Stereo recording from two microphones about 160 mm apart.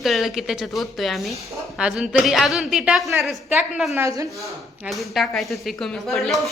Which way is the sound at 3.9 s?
20° right (ahead or behind).